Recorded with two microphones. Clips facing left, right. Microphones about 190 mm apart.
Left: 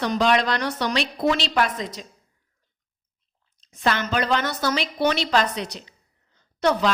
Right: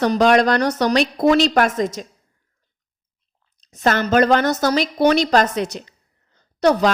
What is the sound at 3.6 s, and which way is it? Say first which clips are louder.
A woman's voice: right 5 dB; 40° right (ahead or behind).